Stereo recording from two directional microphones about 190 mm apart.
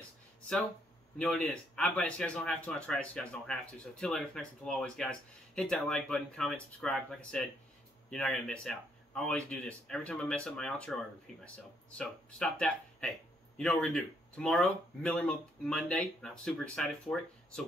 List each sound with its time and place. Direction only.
1.1 s a man's voice: 5° left (ahead or behind)